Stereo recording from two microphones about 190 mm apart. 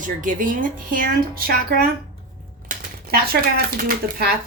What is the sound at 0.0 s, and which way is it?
Speech, 45° right (ahead or behind).